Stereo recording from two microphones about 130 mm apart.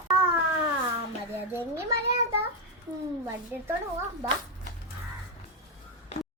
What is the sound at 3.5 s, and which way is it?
Speech, 15° right (ahead or behind).